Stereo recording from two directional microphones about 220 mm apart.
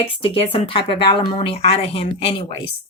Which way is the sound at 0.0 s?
25° left (ahead or behind).